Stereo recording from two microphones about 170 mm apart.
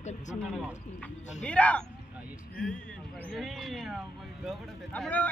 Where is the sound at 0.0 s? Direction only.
45° left (ahead or behind).